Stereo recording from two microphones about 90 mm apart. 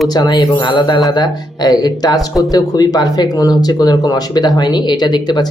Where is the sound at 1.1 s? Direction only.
50° left (ahead or behind).